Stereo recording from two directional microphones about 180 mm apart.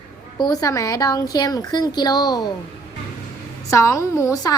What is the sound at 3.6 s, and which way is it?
Speech, 15° left (ahead or behind).